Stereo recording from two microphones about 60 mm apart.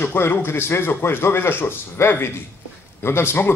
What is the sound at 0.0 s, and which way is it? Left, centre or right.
A man's voice, left.